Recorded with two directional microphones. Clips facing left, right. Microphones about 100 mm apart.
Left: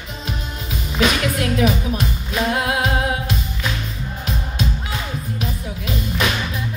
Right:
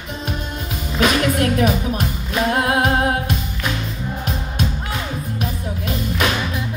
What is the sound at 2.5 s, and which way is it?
Singing, 45° right (ahead or behind).